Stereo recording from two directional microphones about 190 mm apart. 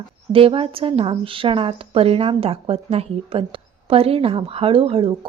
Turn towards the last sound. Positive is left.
turn(degrees=-30)  # may be behind; listen again after turning